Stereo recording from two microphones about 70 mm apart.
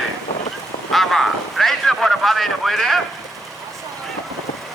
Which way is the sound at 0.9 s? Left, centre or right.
Centre.